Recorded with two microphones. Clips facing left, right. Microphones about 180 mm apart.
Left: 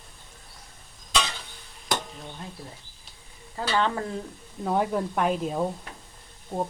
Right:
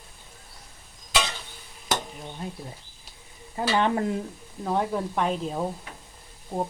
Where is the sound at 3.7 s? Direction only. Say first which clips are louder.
Right 2 dB; 20° right (ahead or behind).